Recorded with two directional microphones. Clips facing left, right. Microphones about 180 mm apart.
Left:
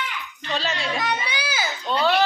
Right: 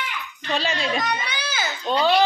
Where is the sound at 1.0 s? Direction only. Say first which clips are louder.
Left 1 dB; 10° left (ahead or behind).